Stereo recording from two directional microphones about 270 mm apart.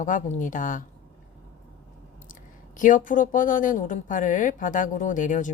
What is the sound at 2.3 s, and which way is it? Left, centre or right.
Speech, left.